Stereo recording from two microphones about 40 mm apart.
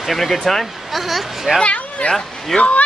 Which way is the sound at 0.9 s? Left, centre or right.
Centre.